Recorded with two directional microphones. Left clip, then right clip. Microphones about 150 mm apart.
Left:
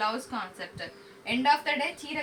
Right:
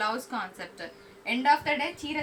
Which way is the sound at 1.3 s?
10° left (ahead or behind).